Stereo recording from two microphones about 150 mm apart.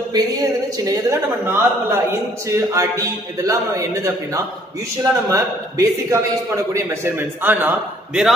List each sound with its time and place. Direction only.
0.1 s a man's voice: 25° right (ahead or behind); by 8.3 s 10° right (ahead or behind)